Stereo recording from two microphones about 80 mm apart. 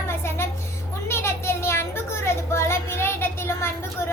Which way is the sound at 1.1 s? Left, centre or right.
Left.